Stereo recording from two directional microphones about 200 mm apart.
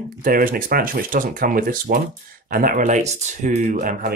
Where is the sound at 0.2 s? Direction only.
45° right (ahead or behind).